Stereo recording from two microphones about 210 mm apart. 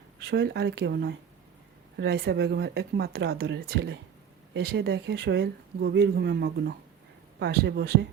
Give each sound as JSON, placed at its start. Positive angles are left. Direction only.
{"t": 0.2, "sound": "speech", "side_deg": -50}